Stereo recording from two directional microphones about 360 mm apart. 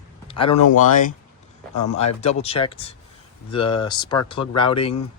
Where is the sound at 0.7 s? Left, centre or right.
Left.